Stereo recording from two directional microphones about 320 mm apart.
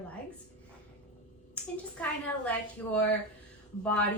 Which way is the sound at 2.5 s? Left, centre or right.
Centre.